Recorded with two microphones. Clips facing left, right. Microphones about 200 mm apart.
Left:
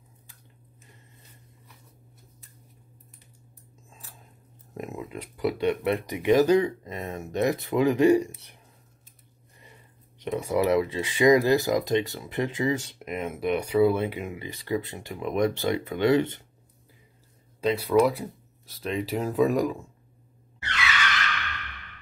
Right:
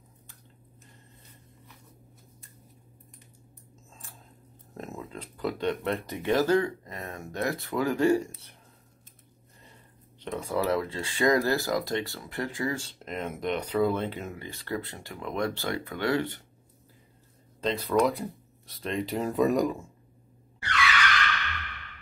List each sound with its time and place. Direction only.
4.7 s speech: 15° left (ahead or behind)
10.4 s speech: 15° left (ahead or behind)
17.6 s speech: 10° left (ahead or behind)
20.6 s skidding: 25° left (ahead or behind)